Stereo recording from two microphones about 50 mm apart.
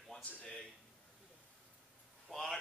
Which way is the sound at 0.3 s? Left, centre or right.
Left.